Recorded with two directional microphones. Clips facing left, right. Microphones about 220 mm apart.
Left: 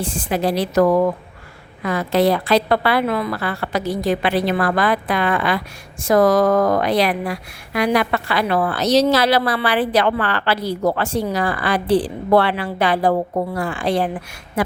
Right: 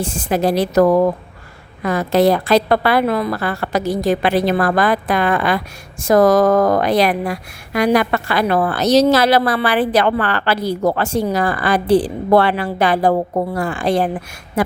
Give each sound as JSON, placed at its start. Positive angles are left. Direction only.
{"t": 0.0, "sound": "a woman's voice", "side_deg": -45}